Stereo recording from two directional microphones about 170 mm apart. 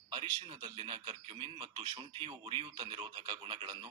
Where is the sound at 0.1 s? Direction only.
25° right (ahead or behind).